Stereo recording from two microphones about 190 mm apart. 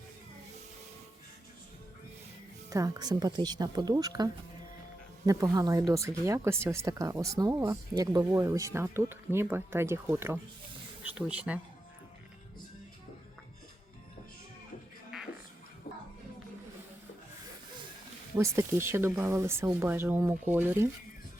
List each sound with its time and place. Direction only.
2.6 s speech: 15° right (ahead or behind)
18.3 s speech: 15° right (ahead or behind)